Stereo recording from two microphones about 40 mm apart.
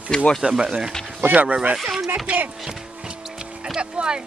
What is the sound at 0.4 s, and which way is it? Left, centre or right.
Speech, centre.